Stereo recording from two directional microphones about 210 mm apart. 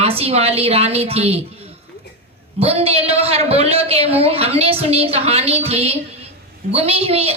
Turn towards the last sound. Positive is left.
turn(degrees=-30)  # may be behind; listen again after turning